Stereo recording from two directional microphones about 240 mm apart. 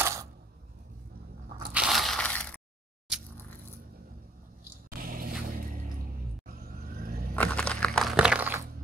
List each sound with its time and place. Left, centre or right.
0.0 s camera: centre
1.7 s crushing: centre
4.8 s vehicle: right
6.6 s vehicle: right
7.3 s crunch: centre